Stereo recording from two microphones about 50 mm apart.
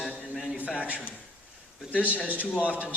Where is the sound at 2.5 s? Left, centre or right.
Right.